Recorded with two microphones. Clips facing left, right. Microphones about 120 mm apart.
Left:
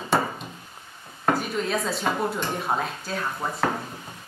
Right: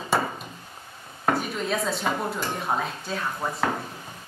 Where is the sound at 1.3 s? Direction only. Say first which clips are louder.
Left 1 dB; centre (ahead or behind).